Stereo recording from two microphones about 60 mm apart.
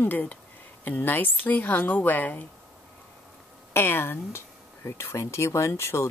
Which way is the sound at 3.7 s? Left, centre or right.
Left.